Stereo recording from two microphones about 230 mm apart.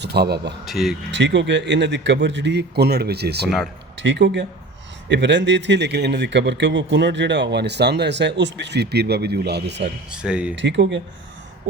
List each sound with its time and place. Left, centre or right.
0.0 s speech: right
0.6 s speech: centre
1.1 s a man's voice: right
10.2 s speech: centre
10.5 s a man's voice: right